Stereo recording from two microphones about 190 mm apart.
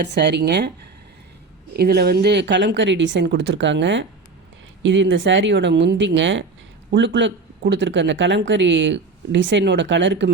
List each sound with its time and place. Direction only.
0.0 s speech: 65° right (ahead or behind)
1.7 s speech: 55° right (ahead or behind); by 10.3 s 75° right (ahead or behind)